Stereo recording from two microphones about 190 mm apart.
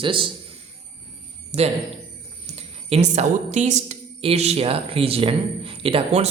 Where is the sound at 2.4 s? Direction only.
35° right (ahead or behind).